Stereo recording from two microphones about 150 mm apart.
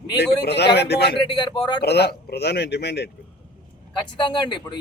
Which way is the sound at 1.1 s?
35° left (ahead or behind).